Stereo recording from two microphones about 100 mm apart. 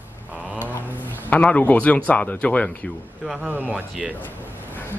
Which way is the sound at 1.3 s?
15° left (ahead or behind).